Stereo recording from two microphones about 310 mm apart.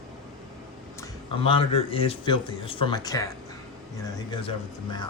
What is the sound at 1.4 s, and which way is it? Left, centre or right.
Speech, centre.